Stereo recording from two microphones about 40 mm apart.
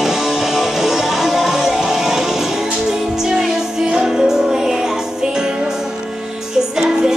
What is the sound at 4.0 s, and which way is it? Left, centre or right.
Music, centre.